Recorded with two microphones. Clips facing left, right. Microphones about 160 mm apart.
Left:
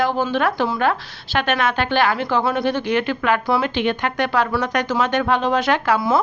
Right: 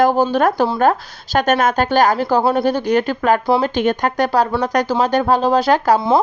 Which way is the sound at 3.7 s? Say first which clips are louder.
Right 4 dB; 45° right (ahead or behind).